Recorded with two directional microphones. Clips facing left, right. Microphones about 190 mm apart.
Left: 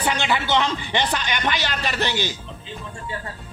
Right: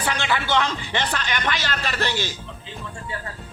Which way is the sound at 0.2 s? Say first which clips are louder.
Left 1 dB; 20° left (ahead or behind).